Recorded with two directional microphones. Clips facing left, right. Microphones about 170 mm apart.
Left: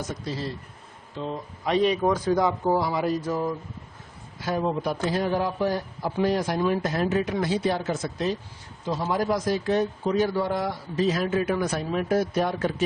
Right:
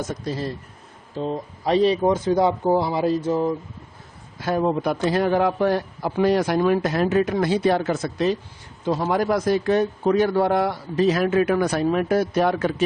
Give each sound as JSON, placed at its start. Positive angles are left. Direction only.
{"t": 0.0, "sound": "speech", "side_deg": -50}
{"t": 1.1, "sound": "speech", "side_deg": -40}
{"t": 4.4, "sound": "a man's voice", "side_deg": -55}
{"t": 8.8, "sound": "a man's voice", "side_deg": -60}